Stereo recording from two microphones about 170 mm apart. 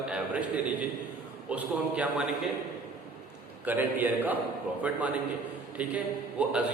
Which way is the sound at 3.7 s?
10° right (ahead or behind).